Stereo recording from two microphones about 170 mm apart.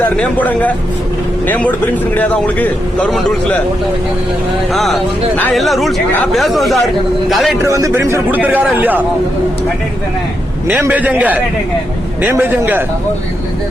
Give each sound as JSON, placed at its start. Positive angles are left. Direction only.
{"t": 0.0, "sound": "a man's voice", "side_deg": 10}
{"t": 4.7, "sound": "speech", "side_deg": 0}
{"t": 7.6, "sound": "speech", "side_deg": -15}
{"t": 10.7, "sound": "speech", "side_deg": -10}